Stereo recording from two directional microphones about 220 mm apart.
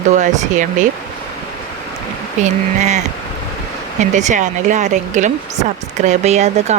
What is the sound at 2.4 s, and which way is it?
Speech, 30° right (ahead or behind).